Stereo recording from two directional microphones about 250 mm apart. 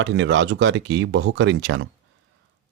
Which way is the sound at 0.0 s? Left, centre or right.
Right.